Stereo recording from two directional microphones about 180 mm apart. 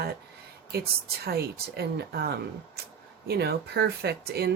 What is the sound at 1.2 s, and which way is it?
Speech, 60° right (ahead or behind).